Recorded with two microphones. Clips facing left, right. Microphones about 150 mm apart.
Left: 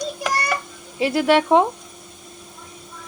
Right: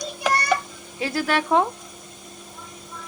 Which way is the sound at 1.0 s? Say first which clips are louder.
Left 7 dB; 25° left (ahead or behind).